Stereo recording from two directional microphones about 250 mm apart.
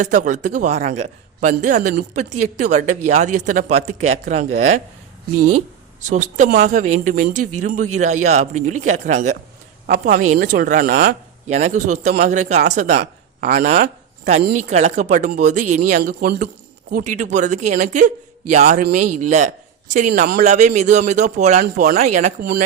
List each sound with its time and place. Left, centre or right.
0.3 s a man's voice: right
5.4 s speech: right
6.0 s speech: right
7.3 s speech: right
7.6 s a man's voice: right